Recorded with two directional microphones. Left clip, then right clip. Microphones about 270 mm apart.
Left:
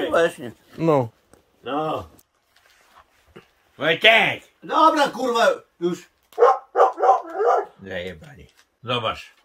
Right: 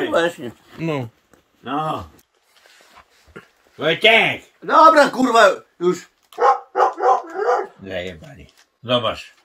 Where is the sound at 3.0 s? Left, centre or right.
Right.